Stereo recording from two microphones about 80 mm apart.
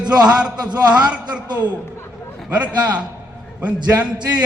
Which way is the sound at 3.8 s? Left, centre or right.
Centre.